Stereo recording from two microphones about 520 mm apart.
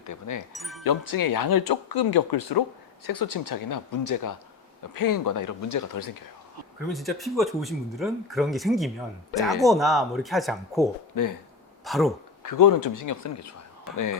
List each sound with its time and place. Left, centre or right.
0.0 s speech: left
0.5 s speech: centre
0.9 s speech: left
6.8 s speech: centre
11.1 s speech: left
11.9 s speech: centre
12.4 s speech: left